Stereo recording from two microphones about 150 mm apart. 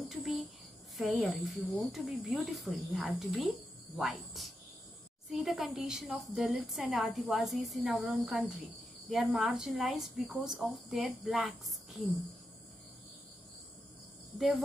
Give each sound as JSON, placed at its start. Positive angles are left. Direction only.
{"t": 0.1, "sound": "cricket", "side_deg": 0}
{"t": 1.0, "sound": "a woman's voice", "side_deg": 5}